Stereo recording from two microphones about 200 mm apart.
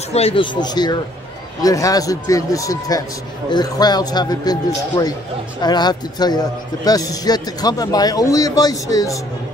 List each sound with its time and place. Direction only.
0.1 s a man's voice: 30° left (ahead or behind)